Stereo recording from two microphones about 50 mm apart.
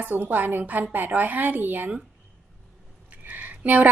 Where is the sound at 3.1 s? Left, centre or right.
Right.